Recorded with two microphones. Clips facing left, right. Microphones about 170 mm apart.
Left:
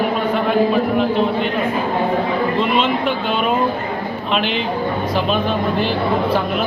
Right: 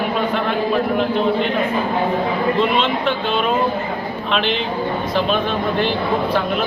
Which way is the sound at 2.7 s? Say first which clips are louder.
Left 1 dB; 5° left (ahead or behind).